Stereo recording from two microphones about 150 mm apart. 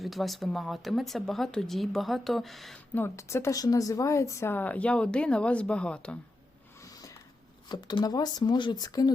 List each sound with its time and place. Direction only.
0.0 s speech: centre (ahead or behind)
2.9 s speech: 15° left (ahead or behind)
6.9 s a sound: 25° left (ahead or behind)
7.7 s speech: 30° left (ahead or behind)